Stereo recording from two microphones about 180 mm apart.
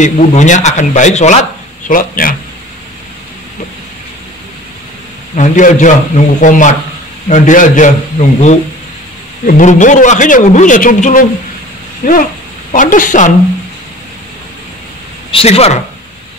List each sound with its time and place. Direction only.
0.0 s a man's voice: 45° left (ahead or behind)
5.3 s a man's voice: 45° left (ahead or behind)
15.3 s speech: 35° left (ahead or behind)